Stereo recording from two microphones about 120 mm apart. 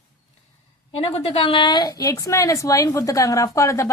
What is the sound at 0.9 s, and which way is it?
A woman's voice, 55° left (ahead or behind).